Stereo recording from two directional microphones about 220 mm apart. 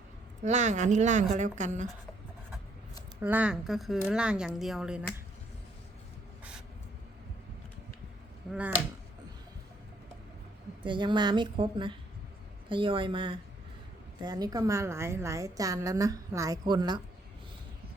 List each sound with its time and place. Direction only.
0.4 s a woman's voice: 30° right (ahead or behind)
3.2 s speech: 10° right (ahead or behind)
10.8 s a woman's voice: 20° right (ahead or behind)